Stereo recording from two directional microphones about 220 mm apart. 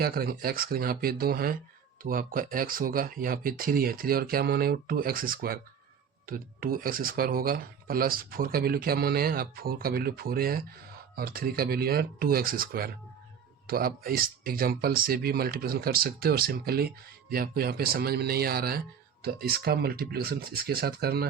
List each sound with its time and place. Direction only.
0.0 s speech: 45° right (ahead or behind)